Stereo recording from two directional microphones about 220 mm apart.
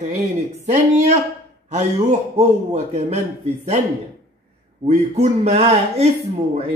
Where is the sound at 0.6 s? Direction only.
30° right (ahead or behind).